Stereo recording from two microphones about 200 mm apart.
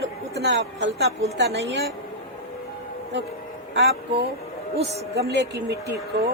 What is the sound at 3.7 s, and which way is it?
Speech, 65° right (ahead or behind).